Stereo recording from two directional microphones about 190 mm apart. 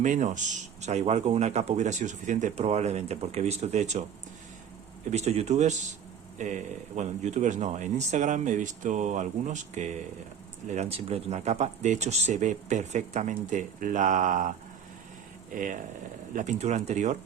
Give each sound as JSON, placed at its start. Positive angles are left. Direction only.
{"t": 0.0, "sound": "speech", "side_deg": -40}
{"t": 5.1, "sound": "speech", "side_deg": -35}
{"t": 6.9, "sound": "speech", "side_deg": -35}
{"t": 15.5, "sound": "speech", "side_deg": -45}